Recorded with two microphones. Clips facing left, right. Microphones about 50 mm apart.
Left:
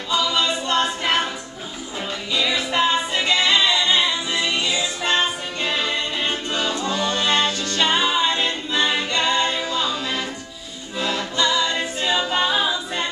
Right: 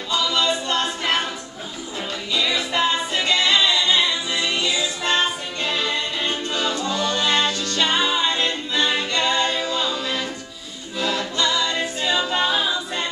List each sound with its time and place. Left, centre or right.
0.1 s a capella: centre
2.3 s music: centre
11.0 s choir: centre